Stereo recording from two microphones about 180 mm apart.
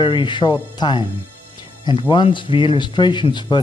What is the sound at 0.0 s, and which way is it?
Speech, 25° left (ahead or behind).